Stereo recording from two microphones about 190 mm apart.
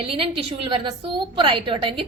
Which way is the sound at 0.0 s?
30° right (ahead or behind).